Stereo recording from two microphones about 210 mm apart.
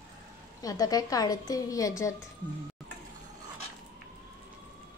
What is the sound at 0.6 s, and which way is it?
A woman's voice, 15° left (ahead or behind).